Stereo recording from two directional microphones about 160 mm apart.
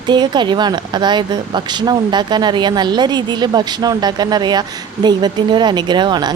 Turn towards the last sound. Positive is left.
turn(degrees=-25)  # may be behind; listen again after turning